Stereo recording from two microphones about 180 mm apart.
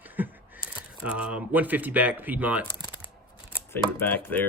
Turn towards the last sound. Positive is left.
turn(degrees=10)  # may be behind; listen again after turning